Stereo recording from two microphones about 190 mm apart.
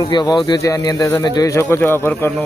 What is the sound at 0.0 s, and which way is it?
Speech, 25° left (ahead or behind).